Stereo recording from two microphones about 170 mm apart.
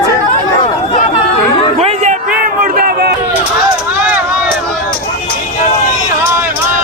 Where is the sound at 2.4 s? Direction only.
60° right (ahead or behind).